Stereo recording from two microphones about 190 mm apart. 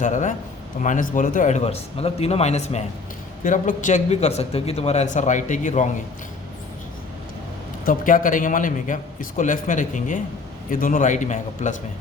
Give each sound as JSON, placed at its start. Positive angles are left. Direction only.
{"t": 0.0, "sound": "a man's voice", "side_deg": 40}
{"t": 7.9, "sound": "a man's voice", "side_deg": 45}